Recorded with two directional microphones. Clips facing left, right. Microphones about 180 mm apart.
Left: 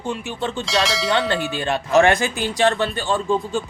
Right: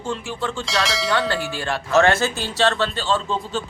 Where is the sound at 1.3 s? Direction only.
20° left (ahead or behind).